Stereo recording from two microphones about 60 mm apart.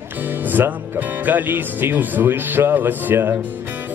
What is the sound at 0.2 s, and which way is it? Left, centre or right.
Speech, right.